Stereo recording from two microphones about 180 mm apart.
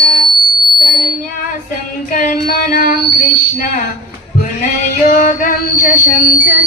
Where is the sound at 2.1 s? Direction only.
50° left (ahead or behind).